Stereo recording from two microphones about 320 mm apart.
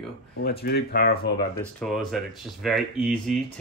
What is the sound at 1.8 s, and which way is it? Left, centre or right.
Speech, centre.